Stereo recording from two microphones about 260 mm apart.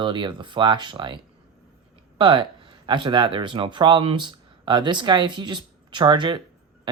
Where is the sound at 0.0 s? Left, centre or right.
Centre.